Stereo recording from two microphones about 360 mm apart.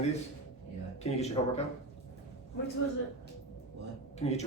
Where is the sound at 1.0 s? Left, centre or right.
Centre.